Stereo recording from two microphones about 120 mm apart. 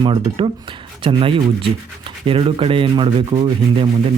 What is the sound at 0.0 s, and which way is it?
Speech, 45° right (ahead or behind).